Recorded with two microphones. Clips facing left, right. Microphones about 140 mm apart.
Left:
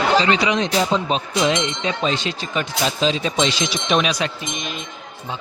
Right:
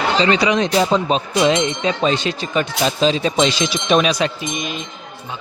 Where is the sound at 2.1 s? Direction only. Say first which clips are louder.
Right 4 dB; 50° right (ahead or behind).